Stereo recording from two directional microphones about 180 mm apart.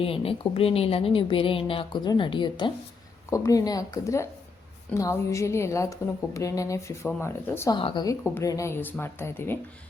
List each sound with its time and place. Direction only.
0.0 s a woman's voice: 30° left (ahead or behind); by 7.8 s 15° left (ahead or behind)
7.8 s a woman's voice: 30° left (ahead or behind)
8.0 s a woman's voice: 15° left (ahead or behind)